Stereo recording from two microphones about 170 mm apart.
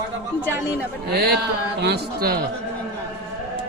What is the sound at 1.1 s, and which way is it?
Speech, 70° right (ahead or behind).